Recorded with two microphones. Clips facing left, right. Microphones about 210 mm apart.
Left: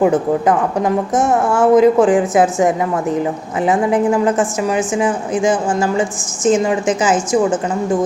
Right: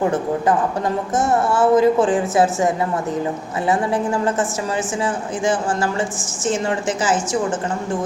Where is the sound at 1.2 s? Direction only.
15° left (ahead or behind).